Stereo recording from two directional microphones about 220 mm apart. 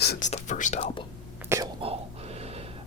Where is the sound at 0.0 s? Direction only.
45° left (ahead or behind).